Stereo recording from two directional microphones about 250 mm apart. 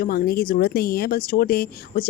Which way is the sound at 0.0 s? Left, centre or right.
Left.